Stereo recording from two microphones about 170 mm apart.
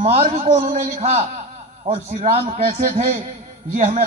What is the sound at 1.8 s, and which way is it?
A man's voice, 35° right (ahead or behind).